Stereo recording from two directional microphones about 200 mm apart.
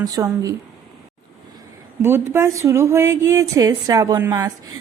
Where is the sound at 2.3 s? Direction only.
15° right (ahead or behind).